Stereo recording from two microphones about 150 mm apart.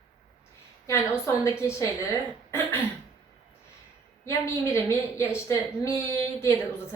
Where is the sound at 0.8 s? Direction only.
20° left (ahead or behind).